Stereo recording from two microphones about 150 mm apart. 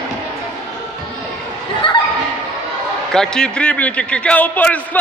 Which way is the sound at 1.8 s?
35° left (ahead or behind).